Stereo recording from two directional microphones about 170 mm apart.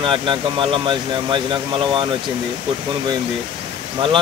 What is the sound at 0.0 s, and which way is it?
Speech, 30° right (ahead or behind).